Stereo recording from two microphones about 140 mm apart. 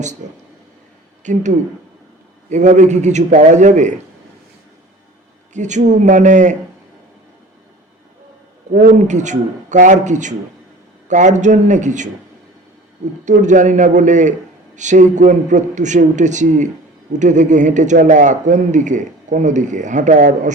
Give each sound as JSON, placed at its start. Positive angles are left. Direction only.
{"t": 1.2, "sound": "a man's voice", "side_deg": -60}
{"t": 5.5, "sound": "a man's voice", "side_deg": -60}
{"t": 8.7, "sound": "a man's voice", "side_deg": -75}
{"t": 13.2, "sound": "a man's voice", "side_deg": -60}